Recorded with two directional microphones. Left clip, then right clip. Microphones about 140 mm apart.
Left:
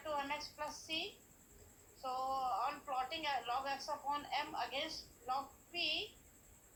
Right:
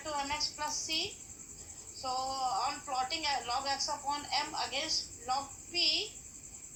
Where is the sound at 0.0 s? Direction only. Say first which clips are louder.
Right 6 dB; 25° right (ahead or behind).